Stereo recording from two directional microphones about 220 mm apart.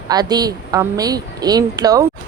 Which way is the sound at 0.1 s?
20° right (ahead or behind).